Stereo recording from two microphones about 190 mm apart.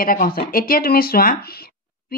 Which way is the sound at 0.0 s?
50° left (ahead or behind).